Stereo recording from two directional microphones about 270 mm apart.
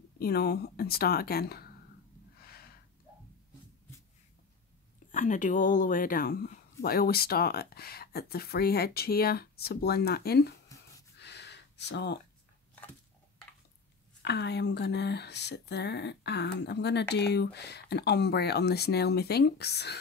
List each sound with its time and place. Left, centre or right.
0.2 s speech: left
2.3 s gasp: left
5.1 s speech: left
10.7 s a sound: centre
11.1 s a sound: left
14.2 s speech: left